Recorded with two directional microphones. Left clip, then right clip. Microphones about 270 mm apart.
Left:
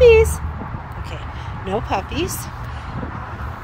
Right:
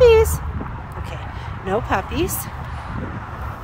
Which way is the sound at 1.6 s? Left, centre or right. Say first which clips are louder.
Right 1 dB; centre.